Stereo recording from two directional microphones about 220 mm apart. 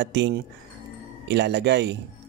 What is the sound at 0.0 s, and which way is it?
Speech, 55° right (ahead or behind).